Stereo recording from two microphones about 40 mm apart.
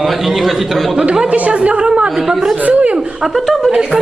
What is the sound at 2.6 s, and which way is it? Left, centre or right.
Speech, right.